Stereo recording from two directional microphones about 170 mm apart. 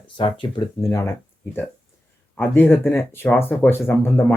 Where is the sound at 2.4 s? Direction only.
10° left (ahead or behind).